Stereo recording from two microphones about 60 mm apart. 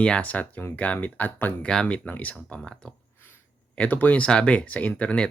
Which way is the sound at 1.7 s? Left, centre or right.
Centre.